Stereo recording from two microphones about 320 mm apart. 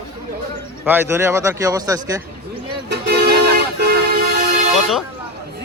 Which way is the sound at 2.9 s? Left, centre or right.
Right.